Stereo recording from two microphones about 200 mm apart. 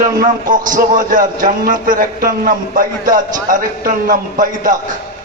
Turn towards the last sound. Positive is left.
turn(degrees=-40)  # may be behind; listen again after turning